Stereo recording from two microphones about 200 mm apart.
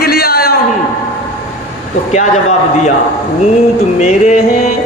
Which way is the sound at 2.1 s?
35° left (ahead or behind).